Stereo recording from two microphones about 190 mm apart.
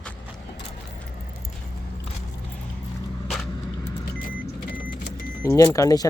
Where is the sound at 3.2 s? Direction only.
Centre (ahead or behind).